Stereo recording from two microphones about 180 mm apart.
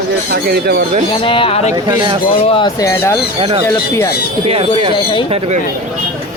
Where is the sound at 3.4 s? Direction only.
30° right (ahead or behind).